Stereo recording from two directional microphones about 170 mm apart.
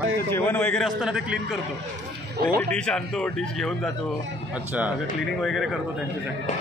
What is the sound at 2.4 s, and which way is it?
Speech, 65° right (ahead or behind).